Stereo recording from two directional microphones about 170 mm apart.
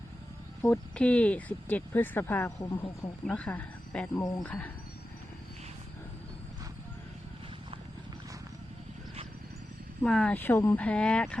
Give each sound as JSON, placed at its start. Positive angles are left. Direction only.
{"t": 0.6, "sound": "speech", "side_deg": 5}
{"t": 4.2, "sound": "speech", "side_deg": 20}
{"t": 4.4, "sound": "speech", "side_deg": 5}
{"t": 10.0, "sound": "speech", "side_deg": 5}